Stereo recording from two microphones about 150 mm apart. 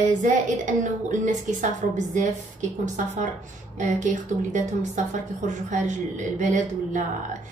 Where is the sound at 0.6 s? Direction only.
55° right (ahead or behind).